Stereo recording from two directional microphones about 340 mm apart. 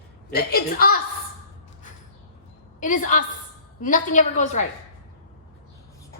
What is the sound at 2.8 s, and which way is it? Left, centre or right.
A woman's voice, left.